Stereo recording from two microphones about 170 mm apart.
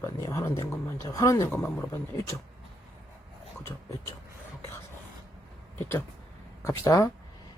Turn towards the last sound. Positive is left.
turn(degrees=20)  # may be behind; listen again after turning